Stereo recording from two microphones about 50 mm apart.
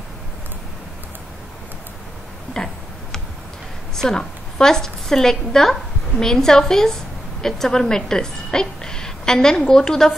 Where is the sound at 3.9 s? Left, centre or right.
Centre.